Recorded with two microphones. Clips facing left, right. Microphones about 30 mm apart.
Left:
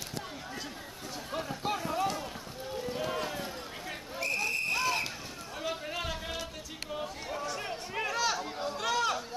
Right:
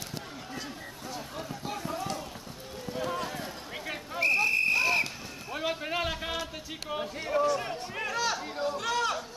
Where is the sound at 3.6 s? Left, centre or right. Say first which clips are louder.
Right 3 dB; centre.